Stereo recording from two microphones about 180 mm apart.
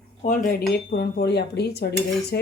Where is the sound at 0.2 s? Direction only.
45° left (ahead or behind).